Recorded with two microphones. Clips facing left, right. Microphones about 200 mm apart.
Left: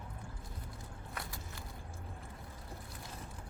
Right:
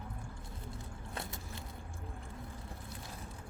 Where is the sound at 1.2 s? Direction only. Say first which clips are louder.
Right 3 dB; 20° right (ahead or behind).